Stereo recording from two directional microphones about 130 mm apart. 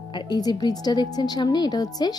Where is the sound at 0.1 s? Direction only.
35° left (ahead or behind).